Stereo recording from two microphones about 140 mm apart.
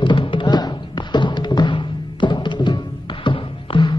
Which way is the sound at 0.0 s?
35° left (ahead or behind).